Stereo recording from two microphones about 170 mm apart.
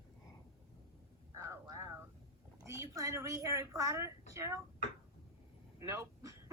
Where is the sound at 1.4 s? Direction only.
15° right (ahead or behind).